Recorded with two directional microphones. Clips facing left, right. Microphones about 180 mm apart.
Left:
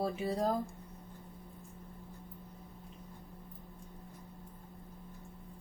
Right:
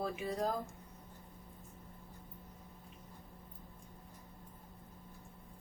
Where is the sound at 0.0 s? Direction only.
30° left (ahead or behind).